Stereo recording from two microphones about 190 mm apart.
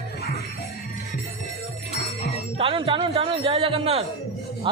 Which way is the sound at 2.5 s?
30° right (ahead or behind).